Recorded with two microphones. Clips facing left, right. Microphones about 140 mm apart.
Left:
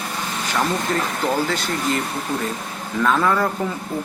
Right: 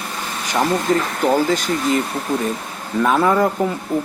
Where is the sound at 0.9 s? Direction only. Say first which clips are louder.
Right 5 dB; 15° right (ahead or behind).